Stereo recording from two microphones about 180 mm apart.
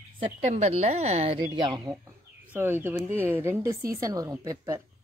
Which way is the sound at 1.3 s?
25° right (ahead or behind).